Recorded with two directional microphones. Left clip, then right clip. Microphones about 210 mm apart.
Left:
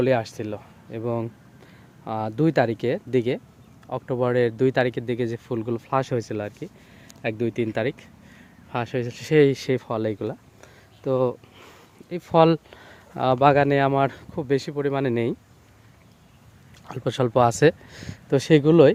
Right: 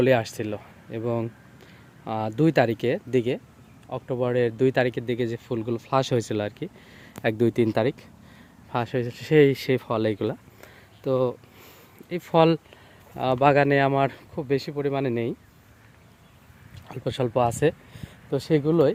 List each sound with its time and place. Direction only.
0.0 s speech: 5° right (ahead or behind)
8.7 s speech: centre (ahead or behind)
11.0 s speech: 5° left (ahead or behind)
16.9 s speech: 15° left (ahead or behind); by 18.9 s 30° left (ahead or behind)